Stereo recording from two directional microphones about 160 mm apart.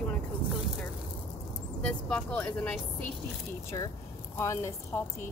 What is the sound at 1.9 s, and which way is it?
Speech, 5° left (ahead or behind).